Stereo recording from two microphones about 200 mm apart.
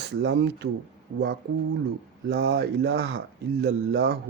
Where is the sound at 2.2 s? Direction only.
55° right (ahead or behind).